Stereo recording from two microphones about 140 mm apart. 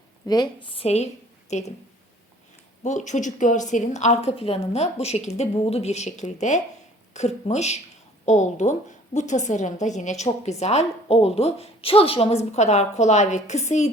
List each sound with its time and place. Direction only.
0.3 s a woman's voice: 30° left (ahead or behind); by 1.7 s 55° left (ahead or behind)
2.8 s a woman's voice: 60° left (ahead or behind)